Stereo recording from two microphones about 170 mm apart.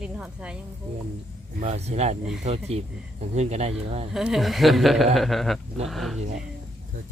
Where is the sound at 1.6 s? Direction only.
40° right (ahead or behind).